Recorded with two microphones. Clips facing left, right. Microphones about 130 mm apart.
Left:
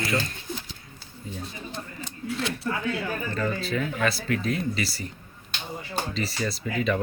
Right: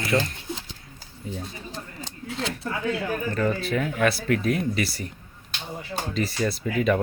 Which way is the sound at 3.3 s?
55° right (ahead or behind).